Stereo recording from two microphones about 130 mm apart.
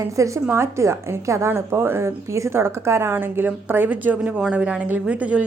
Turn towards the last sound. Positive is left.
turn(degrees=-10)  # may be behind; listen again after turning